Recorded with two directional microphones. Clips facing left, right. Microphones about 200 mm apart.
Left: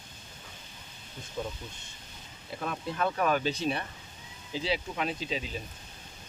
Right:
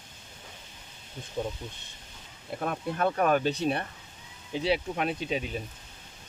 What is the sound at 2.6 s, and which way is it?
Speech, 45° right (ahead or behind).